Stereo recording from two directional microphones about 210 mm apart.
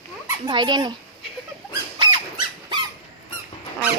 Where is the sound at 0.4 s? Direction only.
20° right (ahead or behind).